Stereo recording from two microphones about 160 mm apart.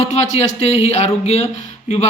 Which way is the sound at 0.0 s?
45° left (ahead or behind).